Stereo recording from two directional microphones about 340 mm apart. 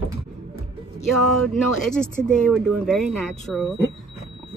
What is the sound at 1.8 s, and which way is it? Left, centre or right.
Speech, centre.